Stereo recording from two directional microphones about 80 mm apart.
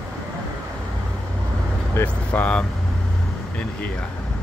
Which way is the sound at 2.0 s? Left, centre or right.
Left.